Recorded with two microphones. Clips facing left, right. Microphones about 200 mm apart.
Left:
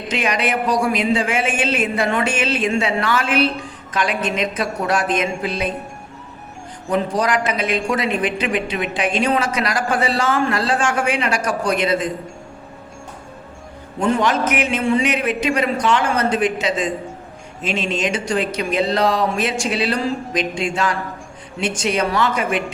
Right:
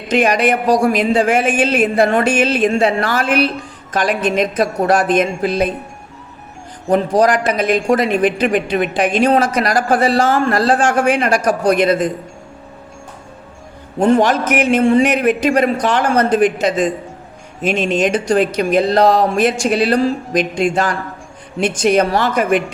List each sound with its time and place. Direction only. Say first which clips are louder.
0.7 s a man's voice: right 4 dB; 40° right (ahead or behind)
2.0 s a woman's voice: right 5 dB; 40° right (ahead or behind)
2.6 s a man's voice: right 5 dB; 50° right (ahead or behind)
6.8 s a woman's voice: right 6 dB; 40° right (ahead or behind)
11.7 s a man's voice: right 5 dB; 55° right (ahead or behind)
14.0 s a man's voice: right 5 dB; 45° right (ahead or behind)